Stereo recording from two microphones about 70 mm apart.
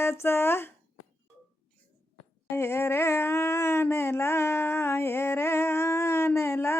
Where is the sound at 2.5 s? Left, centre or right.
Left.